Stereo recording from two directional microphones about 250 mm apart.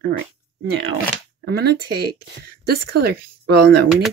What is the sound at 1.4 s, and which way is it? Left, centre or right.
Speech, right.